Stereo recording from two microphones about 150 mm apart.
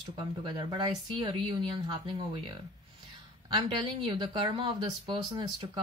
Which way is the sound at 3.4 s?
30° right (ahead or behind).